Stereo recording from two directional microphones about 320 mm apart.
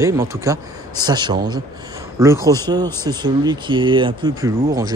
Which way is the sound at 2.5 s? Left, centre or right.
Centre.